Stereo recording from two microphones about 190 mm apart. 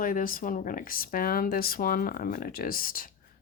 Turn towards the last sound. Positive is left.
turn(degrees=50)  # may be behind; listen again after turning